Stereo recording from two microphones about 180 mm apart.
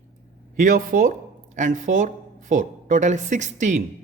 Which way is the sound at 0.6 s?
50° right (ahead or behind).